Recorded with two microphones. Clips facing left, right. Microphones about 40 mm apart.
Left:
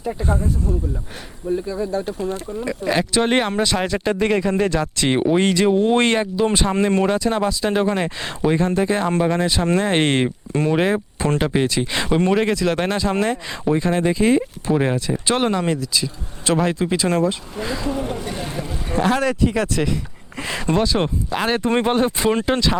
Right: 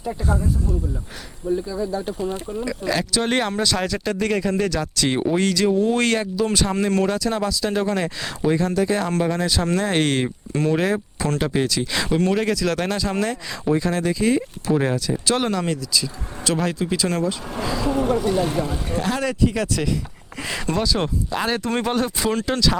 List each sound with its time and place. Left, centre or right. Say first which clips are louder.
0.2 s speech: left 1 dB; left
1.5 s speech: left 1 dB; centre
14.7 s speech: left 1 dB; centre
18.1 s speech: right 7 dB; centre
18.9 s speech: left 4 dB; left